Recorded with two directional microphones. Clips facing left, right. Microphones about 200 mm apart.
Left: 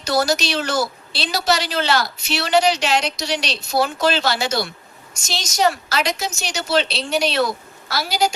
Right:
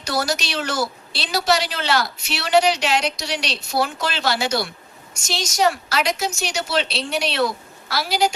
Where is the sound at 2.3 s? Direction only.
40° left (ahead or behind).